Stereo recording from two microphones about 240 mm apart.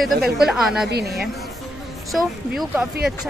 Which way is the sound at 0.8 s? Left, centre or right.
Right.